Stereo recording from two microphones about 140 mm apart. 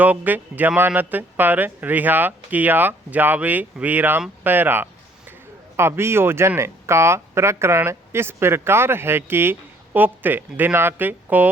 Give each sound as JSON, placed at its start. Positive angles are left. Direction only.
{"t": 0.0, "sound": "speech", "side_deg": -10}